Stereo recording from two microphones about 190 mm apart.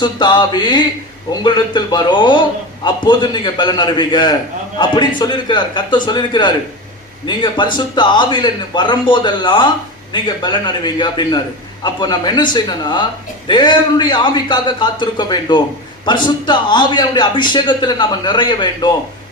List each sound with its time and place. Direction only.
0.0 s a man's voice: 25° left (ahead or behind)